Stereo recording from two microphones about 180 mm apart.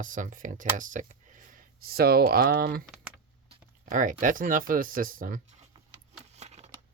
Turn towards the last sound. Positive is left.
turn(degrees=-40)  # may be behind; listen again after turning